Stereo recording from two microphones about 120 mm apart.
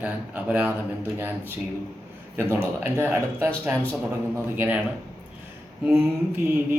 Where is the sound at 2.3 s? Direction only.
20° right (ahead or behind).